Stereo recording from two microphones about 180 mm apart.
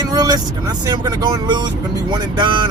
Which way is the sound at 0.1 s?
20° right (ahead or behind).